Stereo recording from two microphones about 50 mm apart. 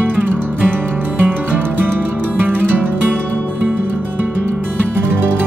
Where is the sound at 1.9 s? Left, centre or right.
Right.